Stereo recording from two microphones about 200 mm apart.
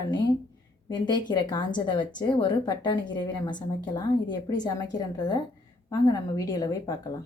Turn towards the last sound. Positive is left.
turn(degrees=20)  # may be behind; listen again after turning